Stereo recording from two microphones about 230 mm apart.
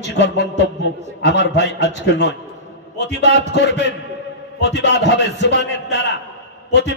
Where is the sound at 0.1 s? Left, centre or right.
Left.